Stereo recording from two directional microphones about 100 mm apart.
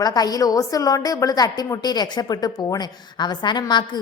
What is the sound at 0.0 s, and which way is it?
A woman's voice, 40° left (ahead or behind).